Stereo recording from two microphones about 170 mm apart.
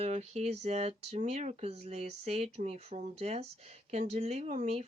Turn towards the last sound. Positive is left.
turn(degrees=-40)  # may be behind; listen again after turning